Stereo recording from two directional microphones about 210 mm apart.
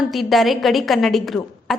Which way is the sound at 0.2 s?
Centre (ahead or behind).